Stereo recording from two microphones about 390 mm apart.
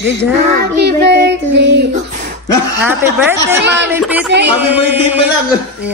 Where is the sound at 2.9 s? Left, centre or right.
Centre.